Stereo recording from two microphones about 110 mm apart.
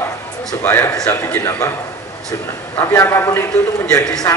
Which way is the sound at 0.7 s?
20° left (ahead or behind).